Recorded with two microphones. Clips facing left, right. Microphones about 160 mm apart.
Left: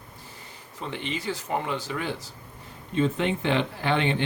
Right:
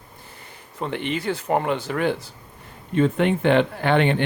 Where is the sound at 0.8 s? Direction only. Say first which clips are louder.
Right 6 dB; 55° right (ahead or behind).